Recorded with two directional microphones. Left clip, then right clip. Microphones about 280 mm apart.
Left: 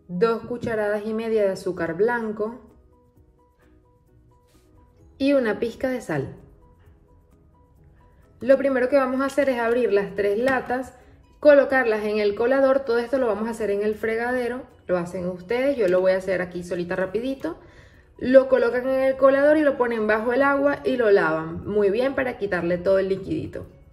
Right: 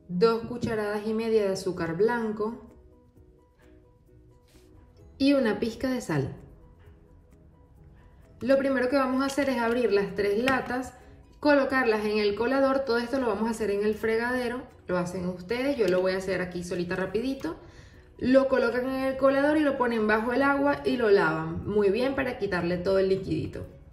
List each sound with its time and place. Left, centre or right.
0.2 s speech: centre
5.2 s speech: centre
8.4 s speech: centre